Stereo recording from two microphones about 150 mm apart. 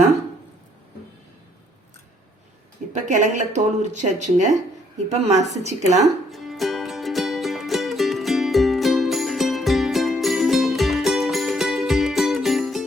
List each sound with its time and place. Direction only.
2.9 s speech: 55° right (ahead or behind)
6.3 s music: centre (ahead or behind)